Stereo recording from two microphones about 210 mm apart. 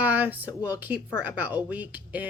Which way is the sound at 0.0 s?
10° right (ahead or behind).